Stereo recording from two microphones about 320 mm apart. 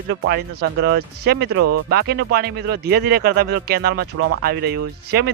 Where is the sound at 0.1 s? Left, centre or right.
Right.